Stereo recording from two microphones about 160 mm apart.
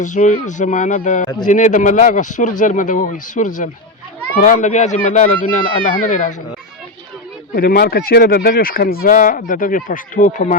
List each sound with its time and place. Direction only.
0.0 s a man's voice: 45° left (ahead or behind)
7.5 s speech: 70° left (ahead or behind); by 10.6 s 50° left (ahead or behind)